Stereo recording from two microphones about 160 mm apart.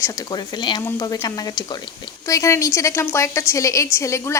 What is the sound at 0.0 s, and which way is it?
A woman's voice, 25° left (ahead or behind).